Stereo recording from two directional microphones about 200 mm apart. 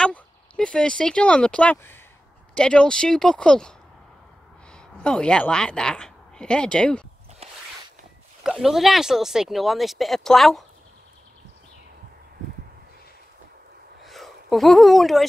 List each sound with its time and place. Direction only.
0.0 s speech: 5° left (ahead or behind)
4.7 s a woman's voice: 5° left (ahead or behind)
8.5 s speech: centre (ahead or behind)
14.0 s a sound: centre (ahead or behind)